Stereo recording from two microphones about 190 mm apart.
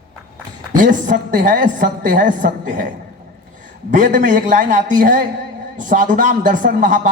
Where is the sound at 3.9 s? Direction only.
45° right (ahead or behind).